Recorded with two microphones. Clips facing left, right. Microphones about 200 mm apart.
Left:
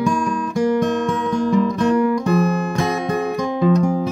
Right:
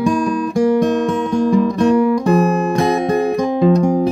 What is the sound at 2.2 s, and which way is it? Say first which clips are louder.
Music: right 4 dB; 40° right (ahead or behind).